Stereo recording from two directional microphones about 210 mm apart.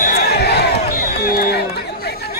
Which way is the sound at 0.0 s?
50° left (ahead or behind).